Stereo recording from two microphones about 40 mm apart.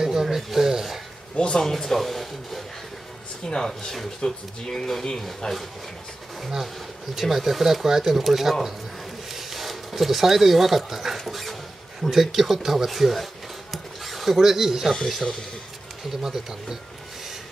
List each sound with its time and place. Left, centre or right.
0.0 s a sound: centre
1.3 s speech: left
1.6 s speech: centre
3.4 s speech: centre
7.2 s speech: centre
16.2 s speech: centre